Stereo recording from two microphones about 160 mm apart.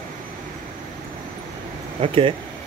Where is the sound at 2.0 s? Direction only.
35° right (ahead or behind).